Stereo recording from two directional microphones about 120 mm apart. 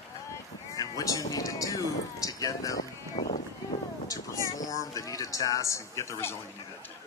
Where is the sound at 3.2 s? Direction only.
70° left (ahead or behind).